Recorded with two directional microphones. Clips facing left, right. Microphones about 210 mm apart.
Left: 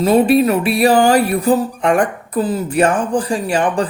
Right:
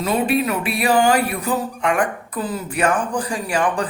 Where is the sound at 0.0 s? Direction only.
35° left (ahead or behind).